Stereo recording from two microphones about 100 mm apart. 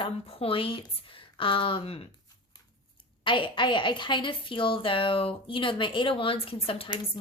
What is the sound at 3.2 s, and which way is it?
A woman's voice, 55° left (ahead or behind).